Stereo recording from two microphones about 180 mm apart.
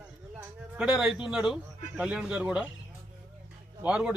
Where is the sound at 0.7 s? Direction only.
5° right (ahead or behind).